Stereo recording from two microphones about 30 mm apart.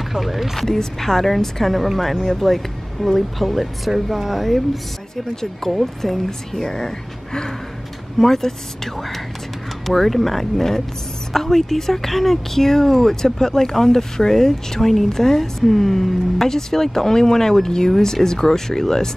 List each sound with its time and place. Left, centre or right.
0.1 s music: centre
0.6 s speech: centre
5.1 s speech: centre
5.6 s speech: centre
8.2 s speech: centre